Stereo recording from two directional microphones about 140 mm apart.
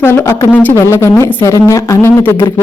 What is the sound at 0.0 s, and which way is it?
Speech, 20° left (ahead or behind).